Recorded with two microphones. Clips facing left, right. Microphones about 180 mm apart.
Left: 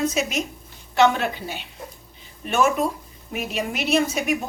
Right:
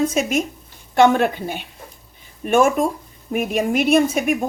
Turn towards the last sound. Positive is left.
turn(degrees=-50)  # may be behind; listen again after turning